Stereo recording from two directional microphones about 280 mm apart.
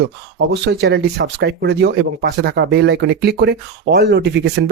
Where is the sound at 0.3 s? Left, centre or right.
Right.